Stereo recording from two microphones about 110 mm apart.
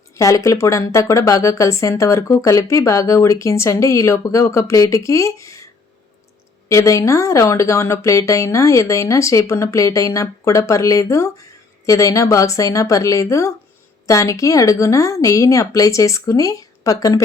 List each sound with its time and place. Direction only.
0.1 s speech: 30° left (ahead or behind)
6.7 s a woman's voice: 30° left (ahead or behind)